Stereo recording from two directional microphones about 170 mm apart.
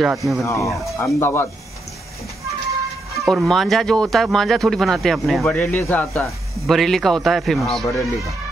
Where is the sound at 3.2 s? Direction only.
Centre (ahead or behind).